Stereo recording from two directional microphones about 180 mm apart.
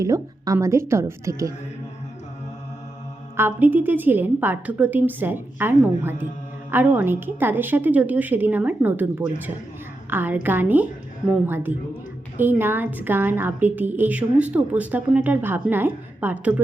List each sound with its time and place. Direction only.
0.0 s a woman's voice: 20° right (ahead or behind)
3.3 s a woman's voice: 10° right (ahead or behind)